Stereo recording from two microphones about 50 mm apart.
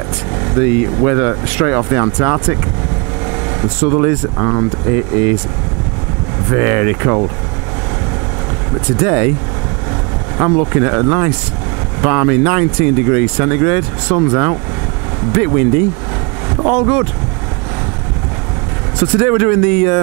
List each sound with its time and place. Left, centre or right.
0.4 s speech: right
3.3 s vehicle: right
4.4 s speech: right
6.5 s speech: right
8.8 s speech: right
10.3 s speech: right
18.9 s speech: centre